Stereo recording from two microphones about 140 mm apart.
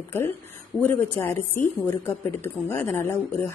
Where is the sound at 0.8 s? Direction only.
15° left (ahead or behind).